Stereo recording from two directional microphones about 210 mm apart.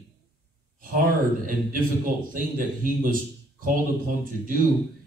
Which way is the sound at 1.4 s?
40° right (ahead or behind).